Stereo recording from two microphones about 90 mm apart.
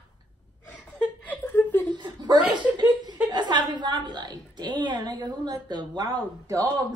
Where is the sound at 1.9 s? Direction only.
50° right (ahead or behind).